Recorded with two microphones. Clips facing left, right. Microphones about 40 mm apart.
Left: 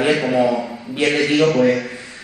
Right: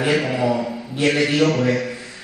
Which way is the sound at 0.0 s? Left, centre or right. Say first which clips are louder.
Left 3 dB; left.